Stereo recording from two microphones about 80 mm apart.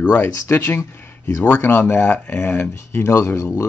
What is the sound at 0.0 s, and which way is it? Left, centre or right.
Speech, left.